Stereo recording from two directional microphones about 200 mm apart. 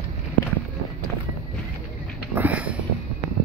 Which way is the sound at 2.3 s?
10° right (ahead or behind).